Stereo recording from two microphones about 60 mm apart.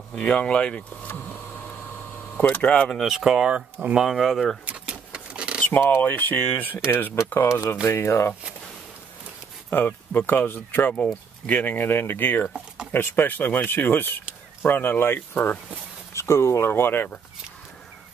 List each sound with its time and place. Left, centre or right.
0.1 s speech: centre
1.0 s a sound: left
2.3 s speech: left
3.0 s speech: centre
4.6 s a sound: centre
5.6 s speech: left
9.7 s speech: left
16.1 s speech: left